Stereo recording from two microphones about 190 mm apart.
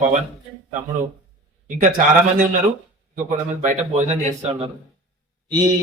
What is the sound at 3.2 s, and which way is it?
Speech, 40° right (ahead or behind).